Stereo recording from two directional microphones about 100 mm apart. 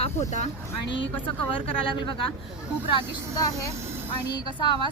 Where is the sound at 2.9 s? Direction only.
45° left (ahead or behind).